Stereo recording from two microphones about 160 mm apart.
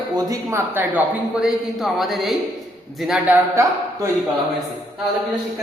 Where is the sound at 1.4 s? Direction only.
Centre (ahead or behind).